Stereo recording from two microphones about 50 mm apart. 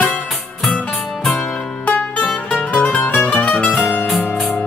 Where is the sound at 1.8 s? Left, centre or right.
Left.